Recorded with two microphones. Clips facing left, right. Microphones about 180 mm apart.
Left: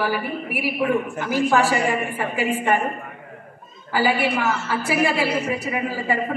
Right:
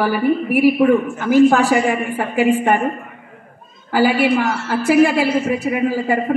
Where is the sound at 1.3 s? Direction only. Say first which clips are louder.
Right 8 dB; 50° right (ahead or behind).